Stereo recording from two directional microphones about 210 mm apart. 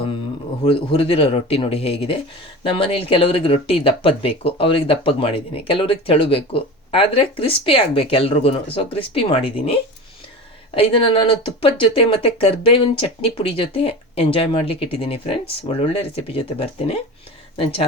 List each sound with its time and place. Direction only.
0.6 s speech: 25° left (ahead or behind)